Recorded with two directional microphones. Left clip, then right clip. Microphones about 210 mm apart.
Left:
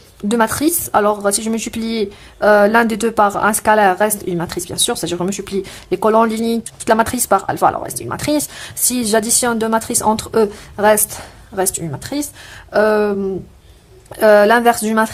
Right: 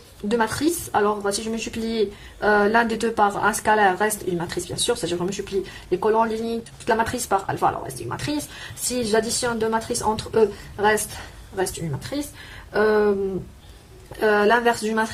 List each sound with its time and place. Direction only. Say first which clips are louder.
0.3 s a woman's voice: left 6 dB; 35° left (ahead or behind)
12.7 s a sound: left 5 dB; 45° left (ahead or behind)
14.2 s a woman's voice: left 8 dB; 35° left (ahead or behind)